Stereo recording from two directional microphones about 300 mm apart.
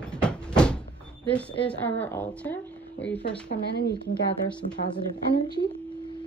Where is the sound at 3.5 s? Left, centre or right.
Left.